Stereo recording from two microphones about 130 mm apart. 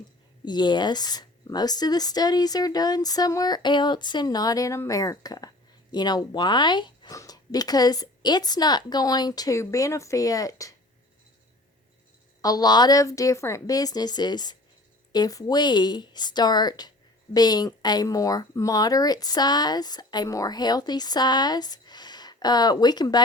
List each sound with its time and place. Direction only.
0.4 s a woman's voice: 35° left (ahead or behind)
12.4 s a woman's voice: 30° left (ahead or behind)